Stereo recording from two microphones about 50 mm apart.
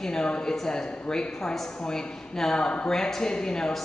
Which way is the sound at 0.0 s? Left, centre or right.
Centre.